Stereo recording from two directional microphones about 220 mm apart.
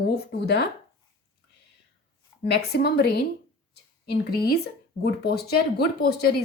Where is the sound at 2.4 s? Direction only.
45° left (ahead or behind).